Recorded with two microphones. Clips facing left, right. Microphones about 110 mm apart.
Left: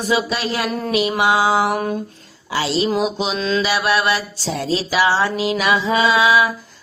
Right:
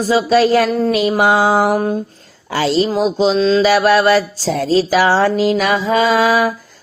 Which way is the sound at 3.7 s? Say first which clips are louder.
Right 7 dB; 45° right (ahead or behind).